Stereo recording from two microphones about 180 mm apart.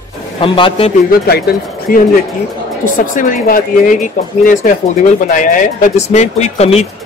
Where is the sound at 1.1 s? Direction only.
60° left (ahead or behind); by 6.8 s 35° left (ahead or behind).